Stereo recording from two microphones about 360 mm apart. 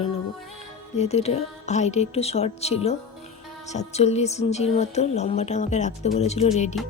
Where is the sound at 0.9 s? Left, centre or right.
Centre.